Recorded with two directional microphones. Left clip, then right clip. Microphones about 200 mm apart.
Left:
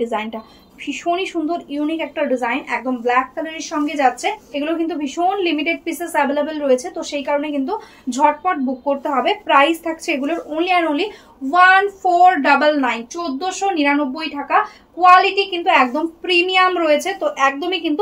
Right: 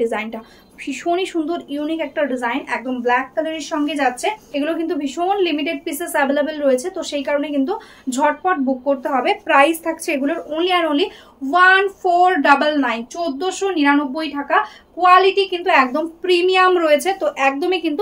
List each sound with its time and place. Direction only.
0.0 s speech: 30° right (ahead or behind)